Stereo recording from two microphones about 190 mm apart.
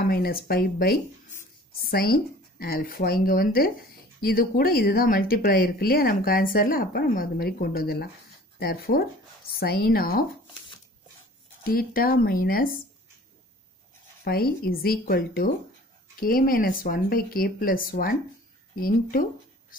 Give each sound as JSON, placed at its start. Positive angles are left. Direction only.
{"t": 0.0, "sound": "speech", "side_deg": 50}
{"t": 11.6, "sound": "speech", "side_deg": 50}
{"t": 14.2, "sound": "speech", "side_deg": 55}